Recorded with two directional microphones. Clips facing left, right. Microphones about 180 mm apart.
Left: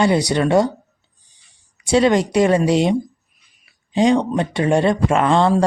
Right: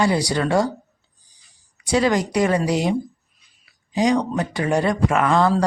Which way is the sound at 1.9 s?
25° left (ahead or behind).